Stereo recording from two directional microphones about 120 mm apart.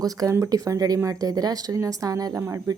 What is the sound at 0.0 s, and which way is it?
Speech, 25° right (ahead or behind).